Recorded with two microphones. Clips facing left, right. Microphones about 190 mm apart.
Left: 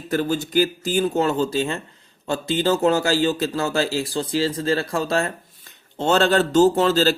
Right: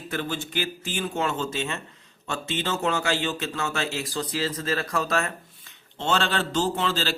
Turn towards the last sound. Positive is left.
turn(degrees=40)  # may be behind; listen again after turning